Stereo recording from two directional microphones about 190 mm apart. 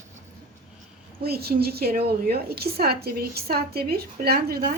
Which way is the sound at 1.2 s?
55° right (ahead or behind).